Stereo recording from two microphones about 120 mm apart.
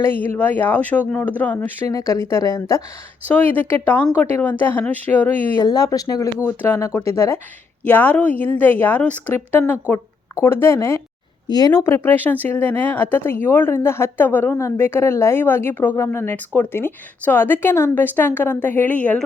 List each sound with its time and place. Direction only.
0.0 s speech: 15° left (ahead or behind)
1.9 s speech: 25° left (ahead or behind)
3.2 s speech: 15° left (ahead or behind)
5.5 s speech: 30° left (ahead or behind)
6.4 s speech: 20° left (ahead or behind)
11.4 s speech: 35° left (ahead or behind)
11.7 s speech: 20° left (ahead or behind)